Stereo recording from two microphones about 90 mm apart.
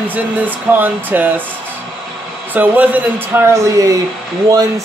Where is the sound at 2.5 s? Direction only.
20° right (ahead or behind); by 3.9 s 40° right (ahead or behind).